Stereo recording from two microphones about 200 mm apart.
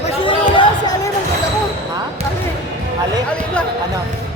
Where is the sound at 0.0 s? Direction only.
25° left (ahead or behind).